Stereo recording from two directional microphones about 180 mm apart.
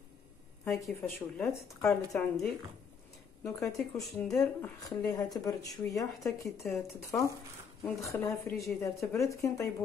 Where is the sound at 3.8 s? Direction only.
Centre (ahead or behind); by 6.1 s 20° left (ahead or behind).